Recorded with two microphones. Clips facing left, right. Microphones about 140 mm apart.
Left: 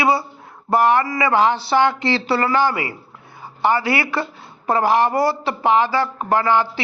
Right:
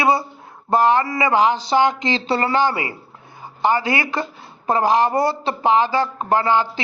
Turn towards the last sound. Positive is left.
turn(degrees=-20)  # may be behind; listen again after turning